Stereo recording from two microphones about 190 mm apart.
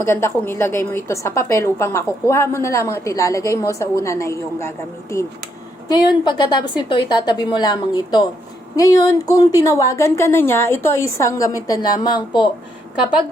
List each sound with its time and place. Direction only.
0.1 s a woman's voice: 10° left (ahead or behind)